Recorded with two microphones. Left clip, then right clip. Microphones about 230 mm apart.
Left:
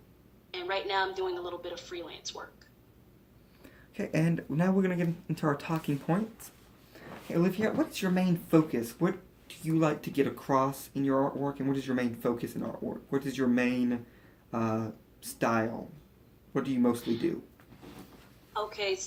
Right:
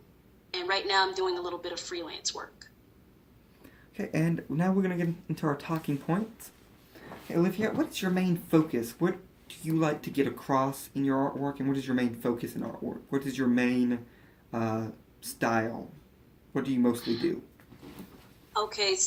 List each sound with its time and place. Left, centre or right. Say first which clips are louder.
0.5 s a woman's voice: right 4 dB; right
3.6 s speech: even; centre
17.0 s a woman's voice: right 1 dB; right
18.5 s a woman's voice: right 4 dB; right